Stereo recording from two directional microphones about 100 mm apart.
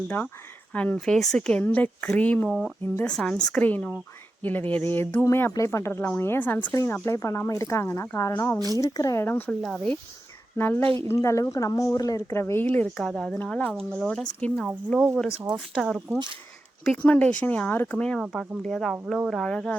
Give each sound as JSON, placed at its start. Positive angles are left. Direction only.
{"t": 0.7, "sound": "speech", "side_deg": 15}
{"t": 2.5, "sound": "speech", "side_deg": 5}
{"t": 8.5, "sound": "a woman's voice", "side_deg": -40}
{"t": 8.8, "sound": "speech", "side_deg": 35}
{"t": 9.2, "sound": "speech", "side_deg": 20}
{"t": 9.6, "sound": "speech", "side_deg": 0}
{"t": 10.6, "sound": "speech", "side_deg": 20}
{"t": 10.8, "sound": "a woman's voice", "side_deg": -65}
{"t": 11.1, "sound": "speech", "side_deg": 30}
{"t": 12.6, "sound": "speech", "side_deg": 15}
{"t": 13.0, "sound": "speech", "side_deg": 5}
{"t": 13.4, "sound": "speech", "side_deg": 15}
{"t": 14.9, "sound": "speech", "side_deg": -5}
{"t": 17.0, "sound": "speech", "side_deg": 15}